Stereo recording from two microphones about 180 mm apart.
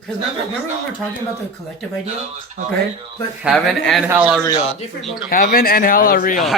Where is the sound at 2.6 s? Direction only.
40° right (ahead or behind).